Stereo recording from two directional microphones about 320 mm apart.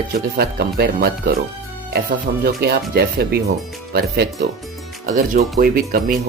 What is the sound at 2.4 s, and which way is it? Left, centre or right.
Speech, right.